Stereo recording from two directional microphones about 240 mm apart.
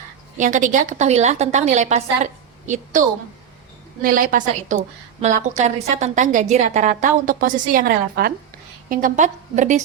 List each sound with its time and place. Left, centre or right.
0.3 s a woman's voice: right
4.0 s a woman's voice: right